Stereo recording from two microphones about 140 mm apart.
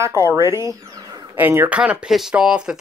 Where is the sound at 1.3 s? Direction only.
15° right (ahead or behind).